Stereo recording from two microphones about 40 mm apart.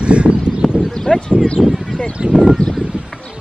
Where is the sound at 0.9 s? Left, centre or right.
Centre.